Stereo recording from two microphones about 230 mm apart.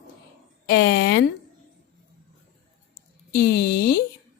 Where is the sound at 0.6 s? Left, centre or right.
Left.